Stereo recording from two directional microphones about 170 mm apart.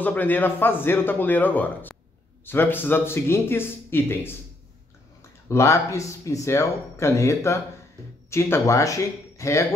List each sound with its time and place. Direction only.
0.0 s speech: 10° left (ahead or behind)
5.5 s speech: 15° left (ahead or behind)